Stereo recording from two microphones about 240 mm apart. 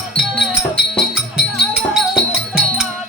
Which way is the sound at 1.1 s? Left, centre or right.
Centre.